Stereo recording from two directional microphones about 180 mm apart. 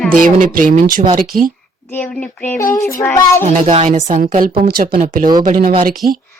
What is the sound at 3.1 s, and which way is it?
Speech, 15° left (ahead or behind).